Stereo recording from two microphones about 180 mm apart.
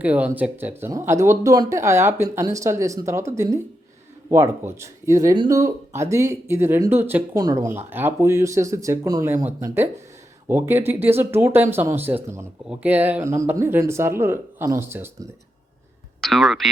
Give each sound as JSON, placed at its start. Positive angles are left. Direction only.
{"t": 0.0, "sound": "speech", "side_deg": -10}
{"t": 16.2, "sound": "speech", "side_deg": 0}